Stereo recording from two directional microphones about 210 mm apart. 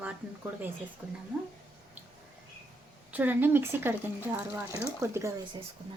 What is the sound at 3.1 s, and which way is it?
Speech, 10° right (ahead or behind).